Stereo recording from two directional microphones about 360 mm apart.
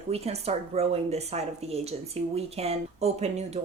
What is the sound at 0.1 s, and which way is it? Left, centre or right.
A woman's voice, centre.